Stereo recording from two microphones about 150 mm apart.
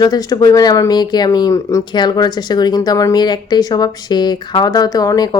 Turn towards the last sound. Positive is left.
turn(degrees=25)  # may be behind; listen again after turning